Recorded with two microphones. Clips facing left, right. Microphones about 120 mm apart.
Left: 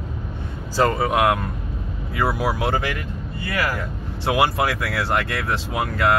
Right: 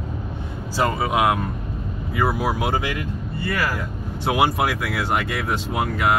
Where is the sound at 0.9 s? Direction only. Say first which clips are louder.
Even; 10° right (ahead or behind).